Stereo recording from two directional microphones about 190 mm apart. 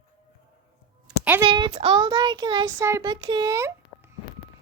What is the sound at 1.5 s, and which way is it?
Child singing, 25° right (ahead or behind).